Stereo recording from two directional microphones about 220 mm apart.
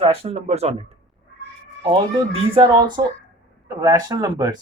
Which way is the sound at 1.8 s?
25° right (ahead or behind).